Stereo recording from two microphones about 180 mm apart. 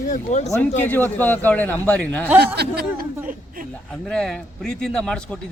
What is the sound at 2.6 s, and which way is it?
Speech, 60° right (ahead or behind).